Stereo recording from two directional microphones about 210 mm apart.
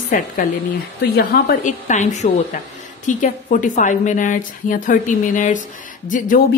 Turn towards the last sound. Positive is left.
turn(degrees=40)  # may be behind; listen again after turning